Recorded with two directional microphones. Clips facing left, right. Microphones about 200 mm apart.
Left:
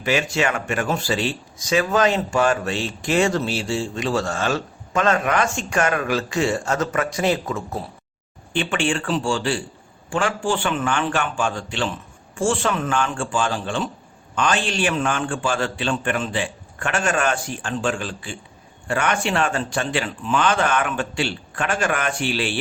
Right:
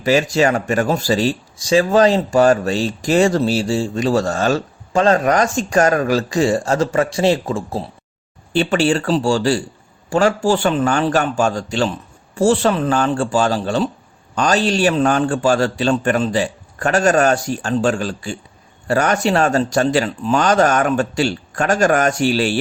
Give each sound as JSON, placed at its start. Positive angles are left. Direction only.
{"t": 0.0, "sound": "speech", "side_deg": -35}